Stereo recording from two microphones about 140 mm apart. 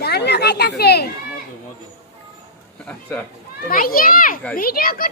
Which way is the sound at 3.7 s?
90° left.